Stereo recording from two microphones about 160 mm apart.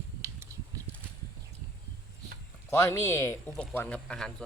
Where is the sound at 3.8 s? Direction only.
10° left (ahead or behind).